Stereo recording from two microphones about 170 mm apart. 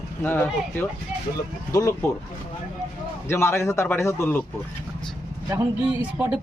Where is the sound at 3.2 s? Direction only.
15° left (ahead or behind).